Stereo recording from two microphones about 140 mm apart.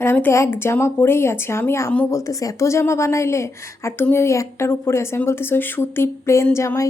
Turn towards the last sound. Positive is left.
turn(degrees=20)  # may be behind; listen again after turning